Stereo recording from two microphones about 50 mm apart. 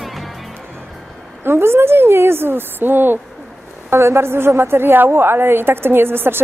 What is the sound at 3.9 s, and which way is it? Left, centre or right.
A woman's voice, right.